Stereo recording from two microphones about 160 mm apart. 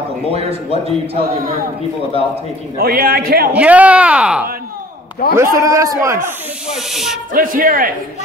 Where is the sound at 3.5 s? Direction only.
10° right (ahead or behind).